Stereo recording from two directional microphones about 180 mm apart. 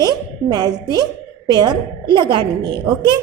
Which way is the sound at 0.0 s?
20° right (ahead or behind).